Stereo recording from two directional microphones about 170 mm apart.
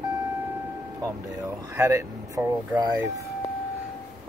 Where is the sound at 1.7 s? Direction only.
20° right (ahead or behind).